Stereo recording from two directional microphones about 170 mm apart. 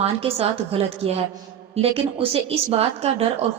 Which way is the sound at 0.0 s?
35° right (ahead or behind).